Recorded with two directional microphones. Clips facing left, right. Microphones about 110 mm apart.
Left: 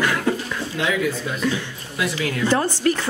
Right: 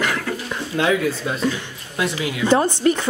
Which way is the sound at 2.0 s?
20° right (ahead or behind).